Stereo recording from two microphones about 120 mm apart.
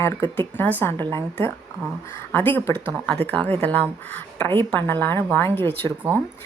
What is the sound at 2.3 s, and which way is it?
A woman's voice, 15° left (ahead or behind).